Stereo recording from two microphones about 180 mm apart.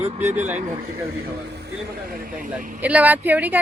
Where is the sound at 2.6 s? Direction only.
50° right (ahead or behind).